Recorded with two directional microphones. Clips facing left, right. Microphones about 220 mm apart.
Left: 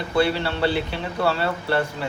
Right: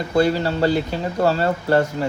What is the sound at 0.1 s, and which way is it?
Speech, 40° right (ahead or behind).